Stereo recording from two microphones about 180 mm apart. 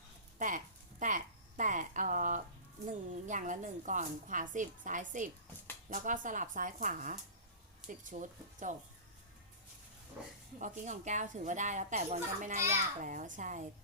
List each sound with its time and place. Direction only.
0.3 s a sound: 45° right (ahead or behind)
2.8 s a woman's voice: 45° right (ahead or behind)
10.6 s speech: 45° right (ahead or behind)